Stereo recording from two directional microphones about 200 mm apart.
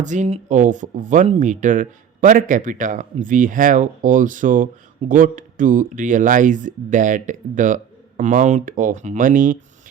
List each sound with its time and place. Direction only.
0.0 s speech: 40° right (ahead or behind)